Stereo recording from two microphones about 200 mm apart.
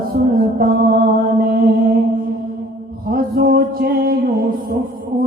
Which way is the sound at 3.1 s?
45° right (ahead or behind).